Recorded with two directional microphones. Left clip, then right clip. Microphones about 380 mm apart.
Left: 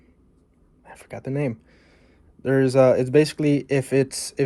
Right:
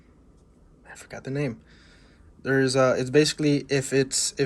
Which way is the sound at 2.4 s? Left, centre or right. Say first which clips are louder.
Left 4 dB; centre.